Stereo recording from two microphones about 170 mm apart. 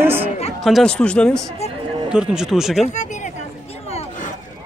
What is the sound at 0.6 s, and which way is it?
Speech, centre (ahead or behind).